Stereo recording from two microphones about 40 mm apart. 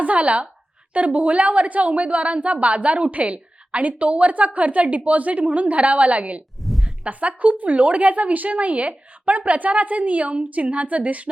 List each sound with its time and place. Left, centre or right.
0.0 s a woman's voice: right
6.6 s a sound: centre
7.0 s a woman's voice: right